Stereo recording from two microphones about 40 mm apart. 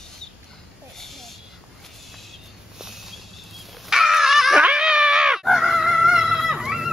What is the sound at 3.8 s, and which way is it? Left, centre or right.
Dog, centre.